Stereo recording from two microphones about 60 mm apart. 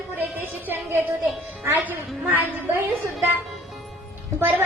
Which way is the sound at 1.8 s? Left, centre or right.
Right.